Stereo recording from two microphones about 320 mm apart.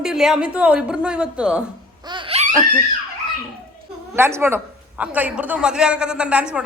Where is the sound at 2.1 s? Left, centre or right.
Centre.